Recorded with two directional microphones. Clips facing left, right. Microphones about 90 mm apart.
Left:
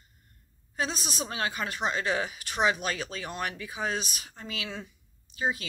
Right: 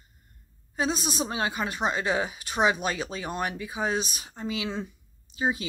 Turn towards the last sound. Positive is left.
turn(degrees=-20)  # may be behind; listen again after turning